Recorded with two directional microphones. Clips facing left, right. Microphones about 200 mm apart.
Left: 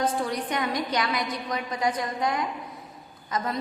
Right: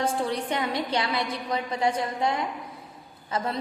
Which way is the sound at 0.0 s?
25° right (ahead or behind).